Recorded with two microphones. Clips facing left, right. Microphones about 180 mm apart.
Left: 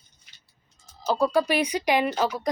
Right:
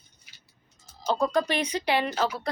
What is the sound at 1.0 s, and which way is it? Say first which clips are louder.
Speech: left 2 dB; 5° left (ahead or behind).